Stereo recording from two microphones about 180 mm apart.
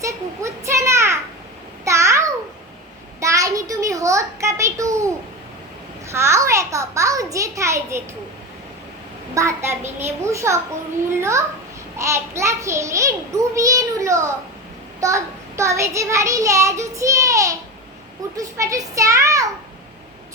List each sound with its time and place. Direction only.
0.0 s a child's voice: 15° right (ahead or behind)
1.8 s a sound: 15° right (ahead or behind)
6.1 s child singing: 15° right (ahead or behind)
9.3 s child singing: 15° right (ahead or behind)